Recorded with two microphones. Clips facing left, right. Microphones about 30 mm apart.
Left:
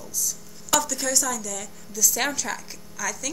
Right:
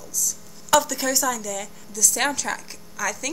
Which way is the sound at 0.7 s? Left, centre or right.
Centre.